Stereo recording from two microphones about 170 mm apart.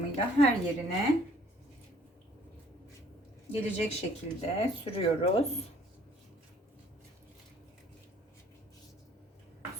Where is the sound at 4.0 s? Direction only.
35° left (ahead or behind).